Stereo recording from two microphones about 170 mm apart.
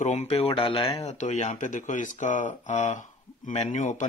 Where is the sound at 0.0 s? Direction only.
40° left (ahead or behind).